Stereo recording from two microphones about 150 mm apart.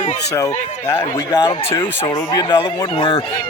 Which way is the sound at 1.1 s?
25° left (ahead or behind).